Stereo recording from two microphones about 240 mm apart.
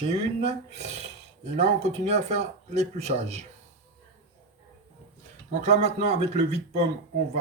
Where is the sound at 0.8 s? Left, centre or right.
Right.